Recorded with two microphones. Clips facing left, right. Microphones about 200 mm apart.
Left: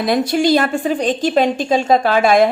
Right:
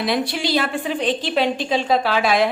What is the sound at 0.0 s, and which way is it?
A woman's voice, 45° left (ahead or behind).